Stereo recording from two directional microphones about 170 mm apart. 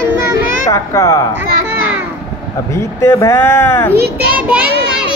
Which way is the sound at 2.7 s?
15° left (ahead or behind).